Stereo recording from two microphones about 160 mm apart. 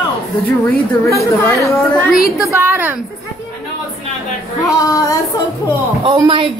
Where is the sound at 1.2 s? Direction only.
20° left (ahead or behind).